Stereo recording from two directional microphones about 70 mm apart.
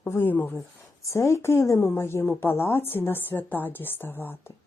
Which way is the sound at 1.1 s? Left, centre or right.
Left.